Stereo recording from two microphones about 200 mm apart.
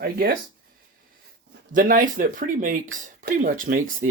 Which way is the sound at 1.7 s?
40° right (ahead or behind).